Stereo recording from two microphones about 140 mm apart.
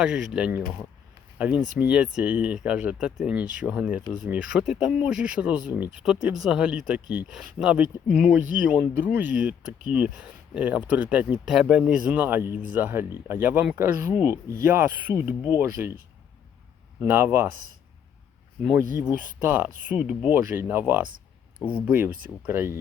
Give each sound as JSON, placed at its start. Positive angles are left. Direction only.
{"t": 0.0, "sound": "speech", "side_deg": -5}
{"t": 17.0, "sound": "speech", "side_deg": -15}
{"t": 19.4, "sound": "speech", "side_deg": -15}